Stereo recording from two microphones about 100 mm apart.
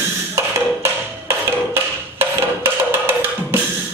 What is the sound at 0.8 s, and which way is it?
Wood block, 25° right (ahead or behind).